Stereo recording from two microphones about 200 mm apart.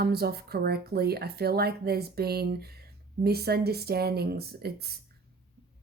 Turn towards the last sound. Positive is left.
turn(degrees=-50)  # may be behind; listen again after turning